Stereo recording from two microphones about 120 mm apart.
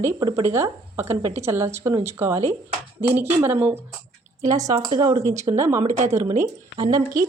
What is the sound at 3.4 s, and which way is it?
Speech, 15° right (ahead or behind).